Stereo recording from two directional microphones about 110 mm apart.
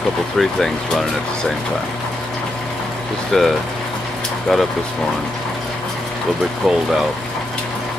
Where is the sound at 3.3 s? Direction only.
Centre (ahead or behind).